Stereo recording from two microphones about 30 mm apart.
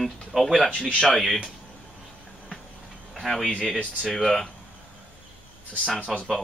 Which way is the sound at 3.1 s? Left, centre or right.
Centre.